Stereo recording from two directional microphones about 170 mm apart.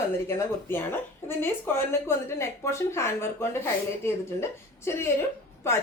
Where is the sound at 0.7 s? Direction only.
15° left (ahead or behind).